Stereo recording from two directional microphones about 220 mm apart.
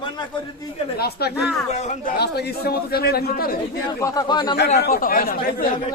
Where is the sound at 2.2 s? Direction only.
45° left (ahead or behind).